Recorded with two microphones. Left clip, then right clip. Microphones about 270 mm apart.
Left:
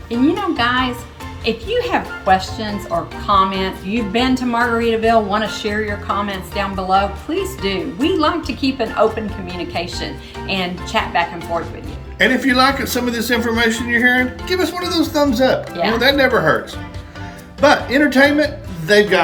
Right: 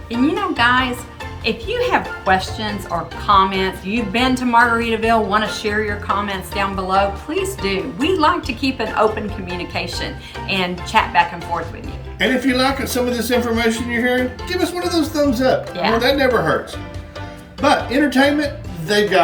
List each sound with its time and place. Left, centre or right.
0.3 s a woman's voice: centre
12.2 s speech: centre
17.6 s speech: centre